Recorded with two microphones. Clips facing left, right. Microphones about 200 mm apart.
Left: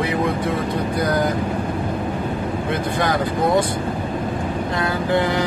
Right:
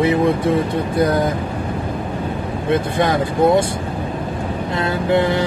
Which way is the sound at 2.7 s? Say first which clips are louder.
Right 5 dB; 25° right (ahead or behind).